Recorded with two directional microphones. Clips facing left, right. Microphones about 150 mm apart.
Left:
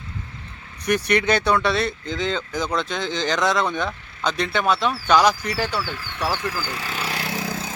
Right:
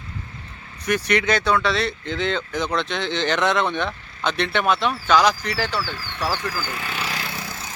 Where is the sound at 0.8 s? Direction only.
15° left (ahead or behind).